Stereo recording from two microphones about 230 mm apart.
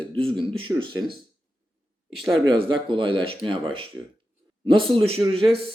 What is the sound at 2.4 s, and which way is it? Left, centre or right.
Speech, right.